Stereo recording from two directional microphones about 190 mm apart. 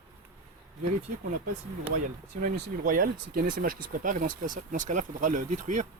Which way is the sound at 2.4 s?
50° right (ahead or behind).